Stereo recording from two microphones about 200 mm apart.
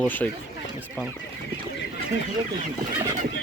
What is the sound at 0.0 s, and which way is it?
Speech, 10° left (ahead or behind).